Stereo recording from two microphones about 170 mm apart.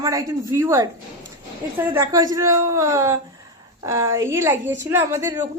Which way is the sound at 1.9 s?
20° right (ahead or behind).